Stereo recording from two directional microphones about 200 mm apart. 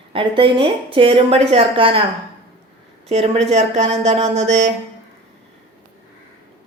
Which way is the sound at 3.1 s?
35° right (ahead or behind).